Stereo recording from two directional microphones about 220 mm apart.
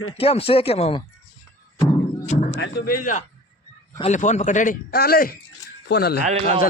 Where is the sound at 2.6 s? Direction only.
45° left (ahead or behind).